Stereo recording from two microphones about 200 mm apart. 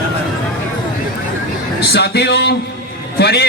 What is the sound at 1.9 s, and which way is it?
Speech, 55° left (ahead or behind).